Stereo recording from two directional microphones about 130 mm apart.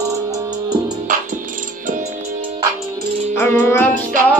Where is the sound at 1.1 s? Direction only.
90° right.